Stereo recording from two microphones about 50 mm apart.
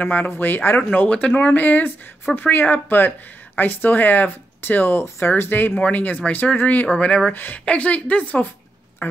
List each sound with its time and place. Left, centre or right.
0.0 s a woman's voice: left
1.5 s speech: left
7.6 s a woman's voice: left
9.0 s a sound: left